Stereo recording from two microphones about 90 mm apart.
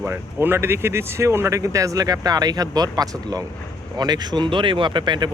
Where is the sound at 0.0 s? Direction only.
25° right (ahead or behind).